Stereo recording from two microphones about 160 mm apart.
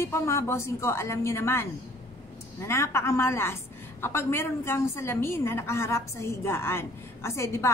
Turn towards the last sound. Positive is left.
turn(degrees=15)  # may be behind; listen again after turning